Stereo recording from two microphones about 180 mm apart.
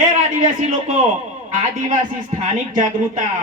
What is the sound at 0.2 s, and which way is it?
A man's voice, 40° right (ahead or behind).